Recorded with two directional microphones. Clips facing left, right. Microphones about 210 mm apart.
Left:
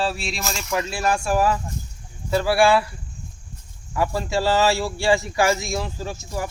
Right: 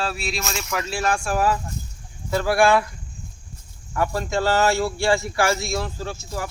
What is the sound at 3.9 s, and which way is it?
Speech, 10° left (ahead or behind).